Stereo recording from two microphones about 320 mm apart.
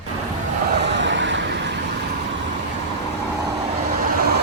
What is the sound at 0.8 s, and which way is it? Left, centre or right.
Vehicle, right.